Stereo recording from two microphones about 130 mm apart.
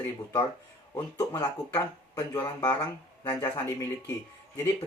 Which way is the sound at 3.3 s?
25° left (ahead or behind).